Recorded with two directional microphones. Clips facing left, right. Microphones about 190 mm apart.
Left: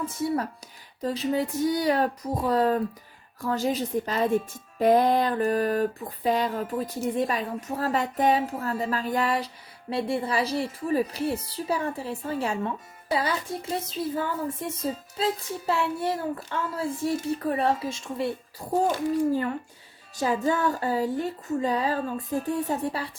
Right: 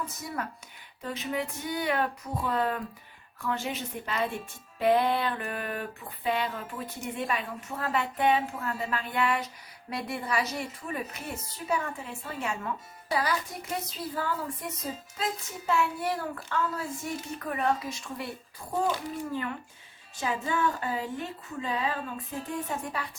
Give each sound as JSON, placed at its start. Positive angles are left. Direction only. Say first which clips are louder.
{"t": 0.2, "sound": "a child's voice", "louder": "left 9 dB", "side_deg": 30}
{"t": 18.7, "sound": "a woman's voice", "louder": "left 6 dB", "side_deg": 40}